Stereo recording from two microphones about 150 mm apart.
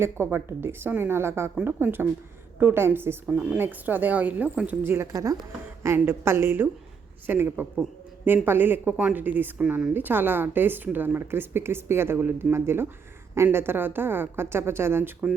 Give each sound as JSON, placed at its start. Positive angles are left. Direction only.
{"t": 0.0, "sound": "speech", "side_deg": -15}